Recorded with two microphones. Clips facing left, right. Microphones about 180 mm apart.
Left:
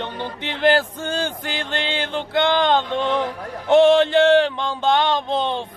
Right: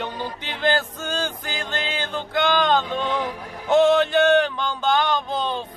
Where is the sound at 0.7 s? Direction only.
30° left (ahead or behind).